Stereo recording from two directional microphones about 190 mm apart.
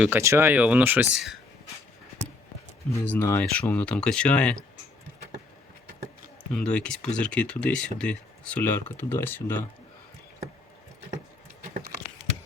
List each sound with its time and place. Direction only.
0.0 s speech: 15° right (ahead or behind)
2.9 s speech: 10° left (ahead or behind)
6.5 s speech: 5° left (ahead or behind)